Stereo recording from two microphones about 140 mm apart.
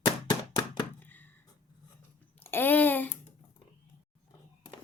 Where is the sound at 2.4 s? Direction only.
15° left (ahead or behind).